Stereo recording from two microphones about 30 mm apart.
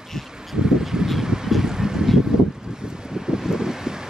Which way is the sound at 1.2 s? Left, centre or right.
Right.